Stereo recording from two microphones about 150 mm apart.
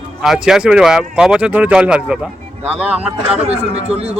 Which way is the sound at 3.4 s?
40° right (ahead or behind).